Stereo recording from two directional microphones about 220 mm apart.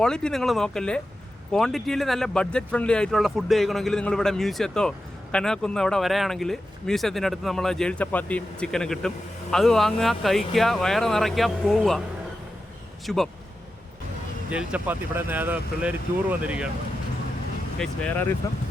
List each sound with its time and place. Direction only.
0.0 s speech: 5° left (ahead or behind)
13.1 s speech: centre (ahead or behind)
14.5 s speech: 5° right (ahead or behind)
17.7 s speech: 5° left (ahead or behind)